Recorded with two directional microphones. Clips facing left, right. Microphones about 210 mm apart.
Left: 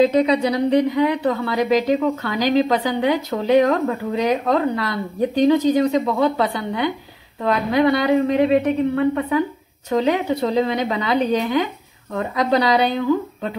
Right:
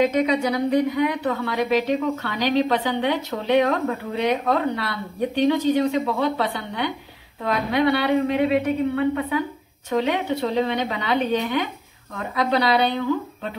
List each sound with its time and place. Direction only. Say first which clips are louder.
0.0 s a woman's voice: left 4 dB; 30° left (ahead or behind)